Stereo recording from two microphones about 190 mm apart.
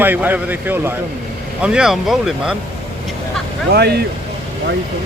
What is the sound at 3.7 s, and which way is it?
Speech, 60° right (ahead or behind).